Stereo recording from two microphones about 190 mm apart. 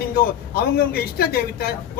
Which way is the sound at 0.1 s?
55° left (ahead or behind).